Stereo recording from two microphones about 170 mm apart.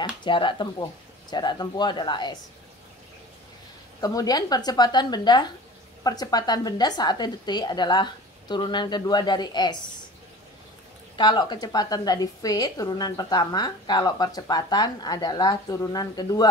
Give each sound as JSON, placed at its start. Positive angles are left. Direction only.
{"t": 0.0, "sound": "a woman's voice", "side_deg": 30}
{"t": 4.0, "sound": "a woman's voice", "side_deg": 20}
{"t": 11.1, "sound": "a woman's voice", "side_deg": 25}